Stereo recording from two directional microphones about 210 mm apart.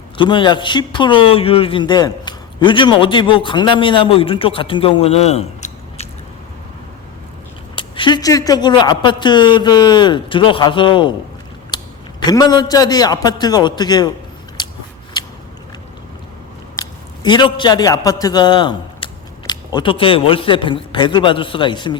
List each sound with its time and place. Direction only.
0.2 s speech: 20° left (ahead or behind)
7.8 s speech: 25° left (ahead or behind)
11.7 s a sound: 20° left (ahead or behind)
12.2 s speech: 20° left (ahead or behind)
17.2 s speech: 20° left (ahead or behind)